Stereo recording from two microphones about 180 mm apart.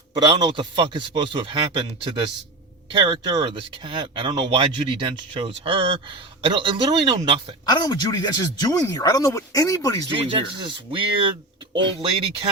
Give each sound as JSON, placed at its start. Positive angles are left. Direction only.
{"t": 0.1, "sound": "speech", "side_deg": -25}
{"t": 7.6, "sound": "speech", "side_deg": 20}
{"t": 10.1, "sound": "speech", "side_deg": -25}